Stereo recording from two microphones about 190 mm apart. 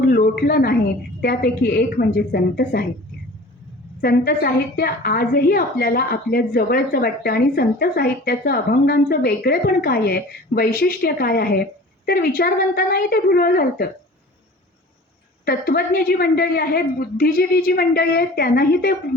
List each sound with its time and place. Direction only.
0.0 s a sound: 55° left (ahead or behind)
1.2 s a woman's voice: 55° left (ahead or behind)
4.0 s a woman's voice: 55° left (ahead or behind)
15.4 s a woman's voice: 55° left (ahead or behind)